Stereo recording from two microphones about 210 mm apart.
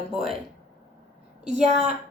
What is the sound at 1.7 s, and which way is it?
Speech, 35° right (ahead or behind).